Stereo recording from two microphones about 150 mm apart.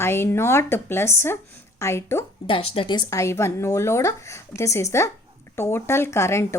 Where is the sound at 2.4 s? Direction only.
35° left (ahead or behind).